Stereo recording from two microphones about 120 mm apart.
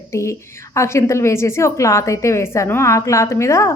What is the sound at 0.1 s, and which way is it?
A woman's voice, 25° left (ahead or behind).